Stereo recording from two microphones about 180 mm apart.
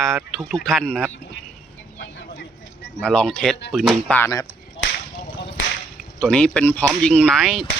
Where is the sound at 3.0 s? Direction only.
5° left (ahead or behind).